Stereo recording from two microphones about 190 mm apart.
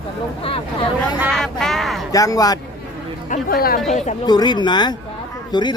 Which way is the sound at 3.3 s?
50° left (ahead or behind).